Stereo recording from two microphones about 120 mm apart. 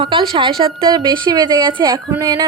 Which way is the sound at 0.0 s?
45° right (ahead or behind).